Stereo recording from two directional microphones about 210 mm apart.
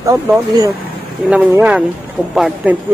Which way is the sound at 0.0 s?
15° right (ahead or behind).